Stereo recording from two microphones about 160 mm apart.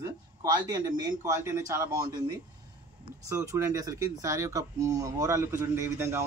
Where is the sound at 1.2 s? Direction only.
15° right (ahead or behind).